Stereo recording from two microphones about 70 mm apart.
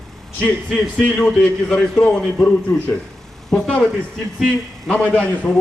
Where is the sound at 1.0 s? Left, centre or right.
Centre.